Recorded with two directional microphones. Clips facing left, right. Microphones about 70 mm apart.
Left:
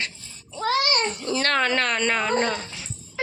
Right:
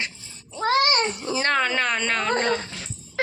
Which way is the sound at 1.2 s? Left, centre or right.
Centre.